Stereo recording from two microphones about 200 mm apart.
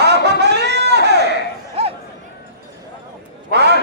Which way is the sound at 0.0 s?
55° right (ahead or behind).